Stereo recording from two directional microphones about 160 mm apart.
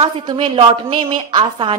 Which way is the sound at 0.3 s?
35° right (ahead or behind).